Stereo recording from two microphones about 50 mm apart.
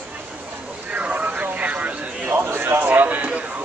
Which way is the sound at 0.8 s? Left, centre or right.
Right.